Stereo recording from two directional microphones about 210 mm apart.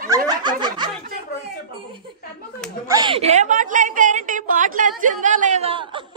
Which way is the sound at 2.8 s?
20° right (ahead or behind).